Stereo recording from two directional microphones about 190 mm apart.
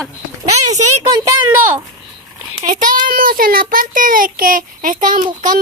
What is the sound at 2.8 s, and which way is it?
A child's voice, 45° right (ahead or behind).